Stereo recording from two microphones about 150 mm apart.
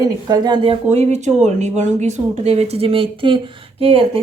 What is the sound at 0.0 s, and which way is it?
A woman's voice, 25° right (ahead or behind).